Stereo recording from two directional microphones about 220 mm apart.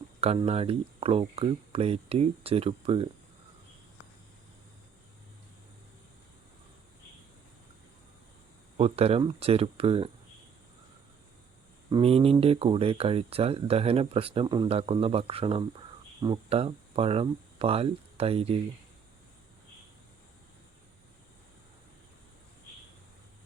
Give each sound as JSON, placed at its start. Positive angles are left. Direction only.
{"t": 0.2, "sound": "speech", "side_deg": -30}
{"t": 8.8, "sound": "speech", "side_deg": -25}
{"t": 11.9, "sound": "speech", "side_deg": -25}